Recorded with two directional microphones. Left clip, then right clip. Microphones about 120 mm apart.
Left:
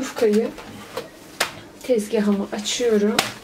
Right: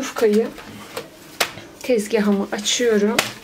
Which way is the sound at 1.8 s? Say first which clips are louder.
Right 2 dB; 35° right (ahead or behind).